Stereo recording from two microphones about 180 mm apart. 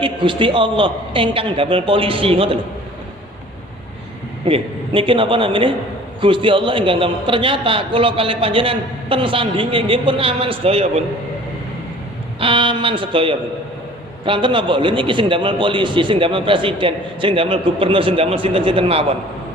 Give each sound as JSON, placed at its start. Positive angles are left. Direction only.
{"t": 0.0, "sound": "a man's voice", "side_deg": -25}
{"t": 4.4, "sound": "a man's voice", "side_deg": -30}
{"t": 12.4, "sound": "a man's voice", "side_deg": -30}